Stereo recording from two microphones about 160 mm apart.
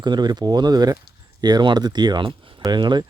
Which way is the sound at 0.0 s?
25° right (ahead or behind).